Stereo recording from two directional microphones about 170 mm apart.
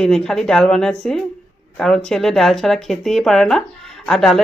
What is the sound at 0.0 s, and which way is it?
Speech, 5° left (ahead or behind).